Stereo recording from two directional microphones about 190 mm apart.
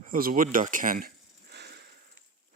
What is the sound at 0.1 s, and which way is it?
Speech, 50° right (ahead or behind).